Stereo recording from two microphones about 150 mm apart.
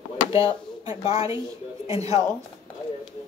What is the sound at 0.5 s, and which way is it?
Speech, 45° left (ahead or behind).